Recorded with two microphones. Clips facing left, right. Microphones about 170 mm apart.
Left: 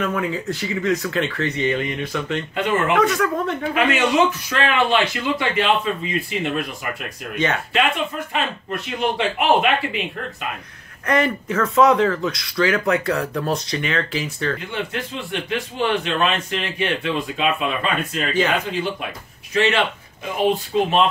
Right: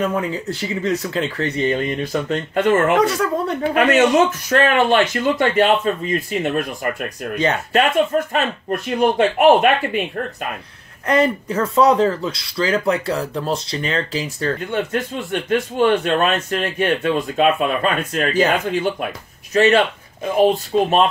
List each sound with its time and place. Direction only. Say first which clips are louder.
0.0 s speech: right 2 dB; 30° right (ahead or behind)
3.7 s speech: right 5 dB; 45° right (ahead or behind)
11.1 s speech: right 3 dB; 30° right (ahead or behind); by 18.3 s 50° right (ahead or behind)
19.5 s speech: right 5 dB; 40° right (ahead or behind)